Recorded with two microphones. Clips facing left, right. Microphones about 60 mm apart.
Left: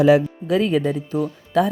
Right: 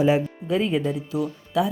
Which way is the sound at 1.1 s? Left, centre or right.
Left.